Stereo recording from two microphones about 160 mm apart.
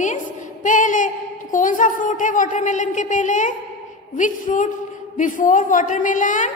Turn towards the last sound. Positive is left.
turn(degrees=55)  # may be behind; listen again after turning